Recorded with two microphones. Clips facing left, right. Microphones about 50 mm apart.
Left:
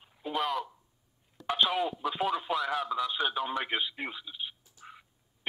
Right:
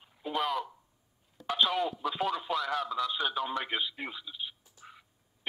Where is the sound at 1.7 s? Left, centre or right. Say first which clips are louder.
Left 1 dB; centre.